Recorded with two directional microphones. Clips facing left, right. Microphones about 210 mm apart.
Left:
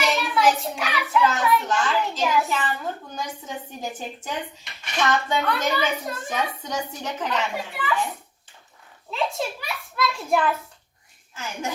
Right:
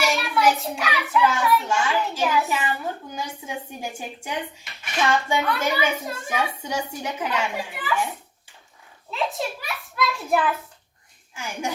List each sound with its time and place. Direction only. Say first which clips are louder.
0.0 s a child's voice: even; 5° right (ahead or behind)
9.0 s a child's voice: even; centre (ahead or behind)